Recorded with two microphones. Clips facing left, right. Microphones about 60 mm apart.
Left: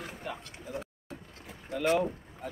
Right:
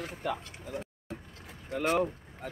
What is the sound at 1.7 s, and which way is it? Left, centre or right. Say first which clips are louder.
Speech: left 1 dB; right.